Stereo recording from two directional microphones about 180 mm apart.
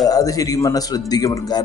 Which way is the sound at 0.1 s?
20° left (ahead or behind).